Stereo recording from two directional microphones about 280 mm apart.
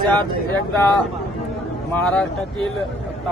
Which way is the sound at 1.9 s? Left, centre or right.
Centre.